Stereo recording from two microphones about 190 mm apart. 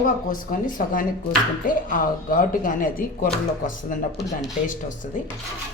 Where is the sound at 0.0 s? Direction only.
45° left (ahead or behind).